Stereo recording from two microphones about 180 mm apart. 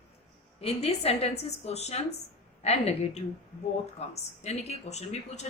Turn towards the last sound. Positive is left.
turn(degrees=40)  # may be behind; listen again after turning